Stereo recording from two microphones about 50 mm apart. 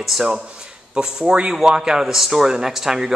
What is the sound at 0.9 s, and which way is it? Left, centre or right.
A man's voice, centre.